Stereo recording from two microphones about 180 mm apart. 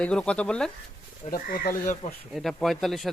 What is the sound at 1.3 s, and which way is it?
Speech, 55° left (ahead or behind).